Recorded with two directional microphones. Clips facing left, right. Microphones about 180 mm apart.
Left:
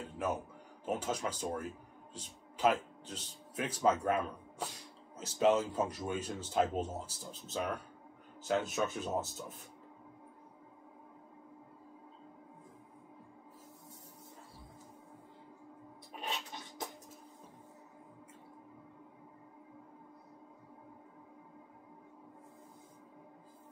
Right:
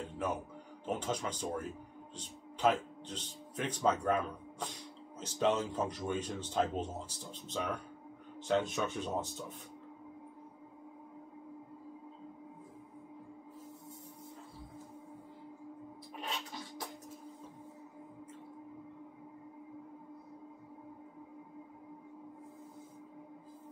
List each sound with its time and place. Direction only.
0.2 s speech: 5° left (ahead or behind)
16.2 s music: 20° left (ahead or behind)